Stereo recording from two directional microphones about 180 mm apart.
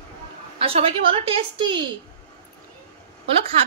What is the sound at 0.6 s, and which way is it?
A woman's voice, 35° right (ahead or behind).